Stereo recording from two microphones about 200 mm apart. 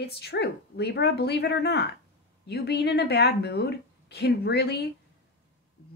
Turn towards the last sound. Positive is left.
turn(degrees=55)  # may be behind; listen again after turning